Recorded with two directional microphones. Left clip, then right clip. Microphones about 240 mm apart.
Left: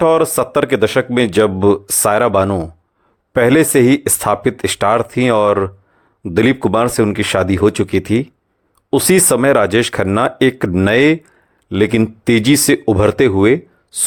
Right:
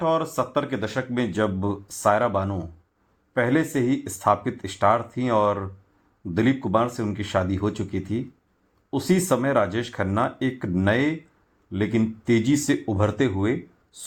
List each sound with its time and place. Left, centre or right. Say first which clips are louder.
0.0 s speech: left 11 dB; left